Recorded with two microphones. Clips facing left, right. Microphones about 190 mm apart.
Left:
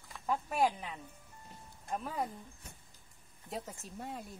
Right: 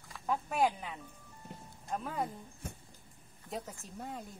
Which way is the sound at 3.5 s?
Centre (ahead or behind).